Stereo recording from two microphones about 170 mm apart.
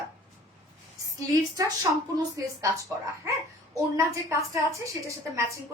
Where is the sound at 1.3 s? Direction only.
20° right (ahead or behind).